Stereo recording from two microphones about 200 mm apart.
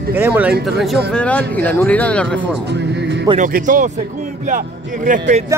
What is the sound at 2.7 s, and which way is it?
Music, 60° right (ahead or behind).